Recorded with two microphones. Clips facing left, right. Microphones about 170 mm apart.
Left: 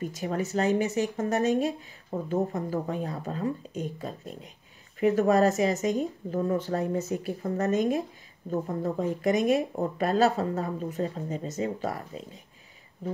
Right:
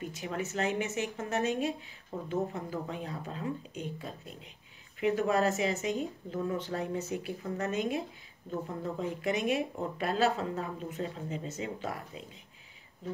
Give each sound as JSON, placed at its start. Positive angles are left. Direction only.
{"t": 0.0, "sound": "speech", "side_deg": 40}